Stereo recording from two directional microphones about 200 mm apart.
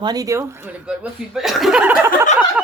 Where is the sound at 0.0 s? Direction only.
20° right (ahead or behind).